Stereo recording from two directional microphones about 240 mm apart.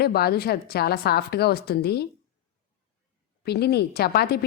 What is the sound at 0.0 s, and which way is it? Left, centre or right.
Speech, left.